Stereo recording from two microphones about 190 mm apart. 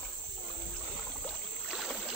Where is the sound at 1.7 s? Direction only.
Centre (ahead or behind).